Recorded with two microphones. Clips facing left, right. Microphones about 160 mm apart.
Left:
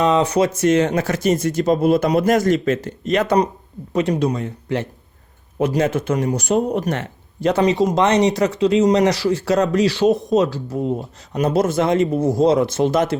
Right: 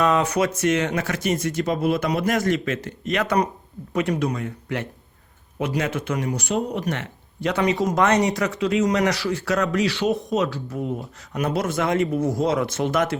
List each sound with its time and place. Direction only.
0.0 s speech: 30° left (ahead or behind)
8.3 s speech: 35° left (ahead or behind)